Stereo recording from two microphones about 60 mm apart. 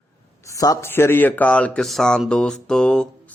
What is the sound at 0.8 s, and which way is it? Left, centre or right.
A man's voice, left.